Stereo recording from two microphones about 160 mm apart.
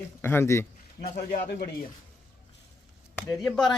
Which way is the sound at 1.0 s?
75° left (ahead or behind).